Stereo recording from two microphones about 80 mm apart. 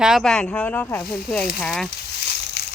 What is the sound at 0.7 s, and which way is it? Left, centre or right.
Speech, left.